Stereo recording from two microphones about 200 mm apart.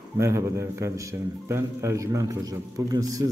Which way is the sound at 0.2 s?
15° right (ahead or behind).